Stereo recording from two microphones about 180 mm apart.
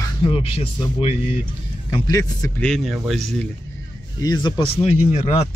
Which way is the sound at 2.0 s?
20° left (ahead or behind).